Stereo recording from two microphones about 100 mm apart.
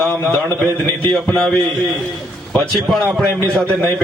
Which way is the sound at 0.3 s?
15° left (ahead or behind).